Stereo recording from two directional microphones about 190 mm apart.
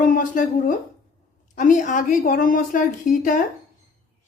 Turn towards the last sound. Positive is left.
turn(degrees=45)  # may be behind; listen again after turning